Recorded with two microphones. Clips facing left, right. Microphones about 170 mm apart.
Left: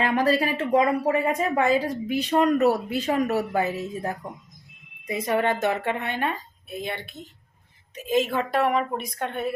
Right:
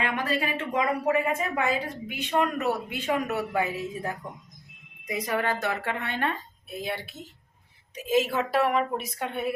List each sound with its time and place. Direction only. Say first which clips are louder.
0.0 s speech: left 6 dB; 35° left (ahead or behind)
5.0 s speech: left 4 dB; 25° left (ahead or behind)
6.7 s a woman's voice: left 1 dB; centre (ahead or behind)